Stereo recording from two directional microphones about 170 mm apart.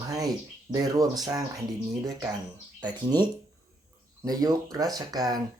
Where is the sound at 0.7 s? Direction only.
20° right (ahead or behind).